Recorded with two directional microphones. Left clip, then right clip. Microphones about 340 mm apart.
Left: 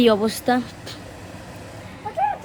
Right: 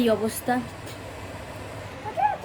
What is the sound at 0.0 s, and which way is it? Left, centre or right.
Speech, centre.